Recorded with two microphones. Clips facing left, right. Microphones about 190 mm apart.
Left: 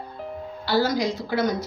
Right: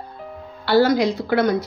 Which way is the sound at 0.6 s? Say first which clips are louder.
Right 6 dB; 60° right (ahead or behind).